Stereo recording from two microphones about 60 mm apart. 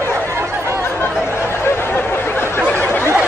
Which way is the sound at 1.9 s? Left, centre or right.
Left.